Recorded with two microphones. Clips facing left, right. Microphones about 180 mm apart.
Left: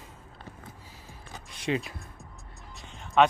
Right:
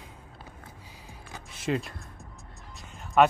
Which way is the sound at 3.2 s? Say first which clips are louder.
Right 1 dB; 5° right (ahead or behind).